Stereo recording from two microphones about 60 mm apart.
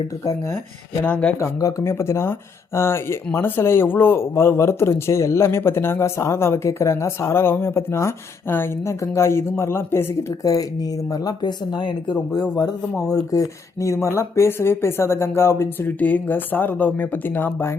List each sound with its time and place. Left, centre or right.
1.0 s speech: left
1.5 s speech: left
1.8 s speech: left
8.4 s speech: left
10.4 s speech: left
12.1 s speech: left
13.0 s speech: centre
13.3 s speech: left
16.0 s speech: left